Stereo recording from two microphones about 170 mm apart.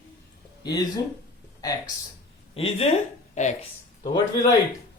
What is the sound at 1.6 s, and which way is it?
Speech, 20° left (ahead or behind).